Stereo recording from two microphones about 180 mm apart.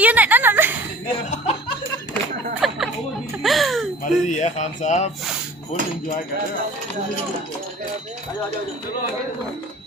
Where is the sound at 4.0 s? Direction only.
45° left (ahead or behind).